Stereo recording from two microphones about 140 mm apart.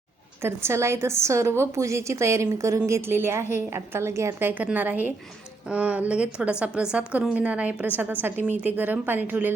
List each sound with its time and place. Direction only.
0.4 s a woman's voice: 20° right (ahead or behind)